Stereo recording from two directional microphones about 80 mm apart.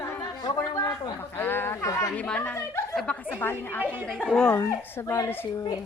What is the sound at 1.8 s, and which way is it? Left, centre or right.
Chatter, left.